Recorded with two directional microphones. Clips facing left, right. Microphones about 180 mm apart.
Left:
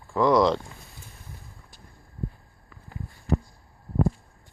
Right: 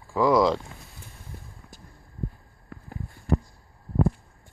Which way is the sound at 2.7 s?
65° right (ahead or behind).